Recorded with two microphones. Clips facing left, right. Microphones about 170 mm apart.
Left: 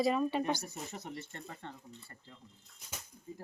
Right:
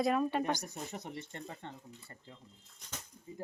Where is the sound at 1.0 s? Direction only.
15° right (ahead or behind).